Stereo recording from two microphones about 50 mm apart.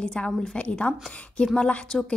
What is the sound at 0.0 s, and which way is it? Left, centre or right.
A woman's voice, centre.